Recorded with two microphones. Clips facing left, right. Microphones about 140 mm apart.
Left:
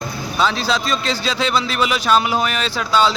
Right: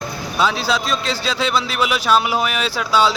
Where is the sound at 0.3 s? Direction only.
5° right (ahead or behind).